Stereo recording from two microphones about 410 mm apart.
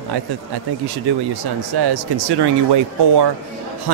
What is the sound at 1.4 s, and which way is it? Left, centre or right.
Speech, right.